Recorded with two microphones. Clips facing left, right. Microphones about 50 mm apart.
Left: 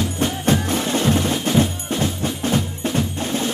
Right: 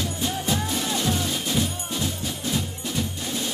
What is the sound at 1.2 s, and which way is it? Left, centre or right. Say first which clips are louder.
Drum: left 7 dB; left.